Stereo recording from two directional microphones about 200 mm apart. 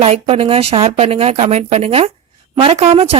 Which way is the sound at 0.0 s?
30° right (ahead or behind).